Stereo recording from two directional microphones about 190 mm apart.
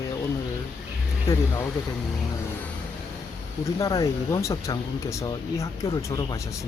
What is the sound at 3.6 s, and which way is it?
Speech, 15° left (ahead or behind).